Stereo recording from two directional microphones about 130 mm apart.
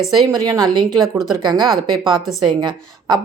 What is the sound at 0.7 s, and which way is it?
A woman's voice, 35° right (ahead or behind).